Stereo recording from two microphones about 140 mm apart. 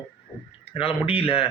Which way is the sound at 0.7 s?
40° left (ahead or behind).